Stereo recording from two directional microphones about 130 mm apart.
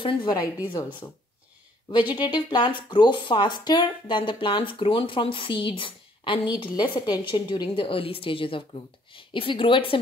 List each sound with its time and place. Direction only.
0.0 s a woman's voice: 40° left (ahead or behind)
2.1 s a woman's voice: 35° left (ahead or behind)